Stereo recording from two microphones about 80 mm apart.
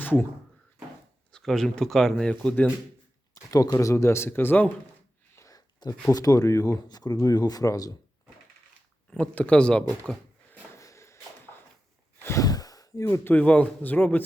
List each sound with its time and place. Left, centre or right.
0.0 s speech: left
1.3 s speech: centre
2.3 s speech: centre
3.3 s speech: left
3.9 s a man's voice: left
5.3 s speech: left
6.7 s speech: left
9.0 s speech: centre
10.8 s shuffle: left
12.4 s sigh: left
13.1 s a man's voice: left
13.4 s a man's voice: centre